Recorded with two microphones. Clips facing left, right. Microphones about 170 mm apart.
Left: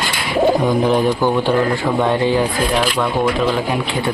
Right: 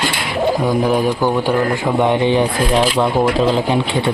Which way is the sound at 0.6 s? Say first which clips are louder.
Even; 5° right (ahead or behind).